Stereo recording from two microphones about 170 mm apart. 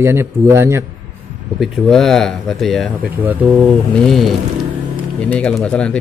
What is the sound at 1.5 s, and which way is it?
Speech, centre (ahead or behind).